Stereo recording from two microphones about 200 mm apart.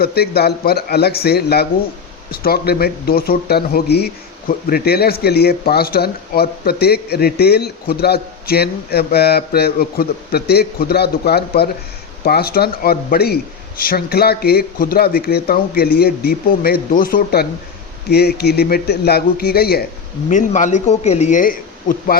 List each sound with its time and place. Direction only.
0.0 s speech: 50° left (ahead or behind)
20.3 s speech: 40° left (ahead or behind)